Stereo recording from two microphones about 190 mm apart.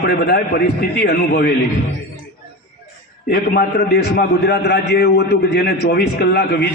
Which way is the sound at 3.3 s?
60° left (ahead or behind).